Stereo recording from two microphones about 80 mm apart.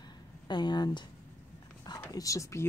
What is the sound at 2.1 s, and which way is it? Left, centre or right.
Speech, left.